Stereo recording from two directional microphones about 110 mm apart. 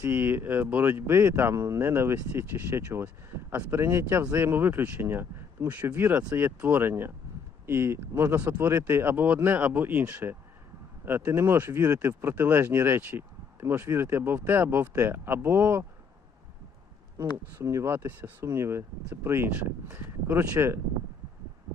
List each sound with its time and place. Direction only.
0.0 s speech: 15° right (ahead or behind)
17.3 s speech: 30° right (ahead or behind)